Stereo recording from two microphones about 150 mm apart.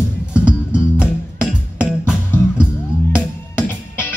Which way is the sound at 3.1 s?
15° left (ahead or behind).